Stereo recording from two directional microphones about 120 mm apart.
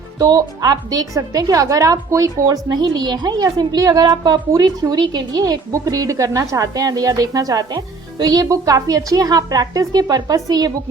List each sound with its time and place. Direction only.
0.2 s a woman's voice: 35° right (ahead or behind)